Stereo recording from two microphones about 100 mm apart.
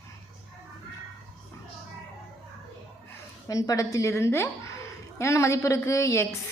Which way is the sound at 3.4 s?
35° left (ahead or behind).